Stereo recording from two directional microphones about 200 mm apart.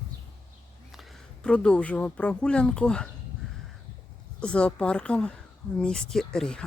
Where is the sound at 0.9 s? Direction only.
Centre (ahead or behind).